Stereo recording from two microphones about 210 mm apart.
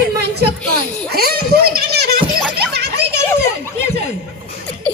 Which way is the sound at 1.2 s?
45° right (ahead or behind).